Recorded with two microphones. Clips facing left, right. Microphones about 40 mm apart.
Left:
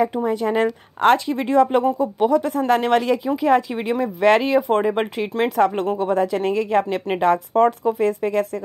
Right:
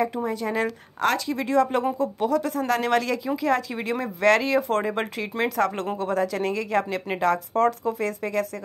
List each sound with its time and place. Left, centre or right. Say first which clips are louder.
0.0 s speech: left 5 dB; left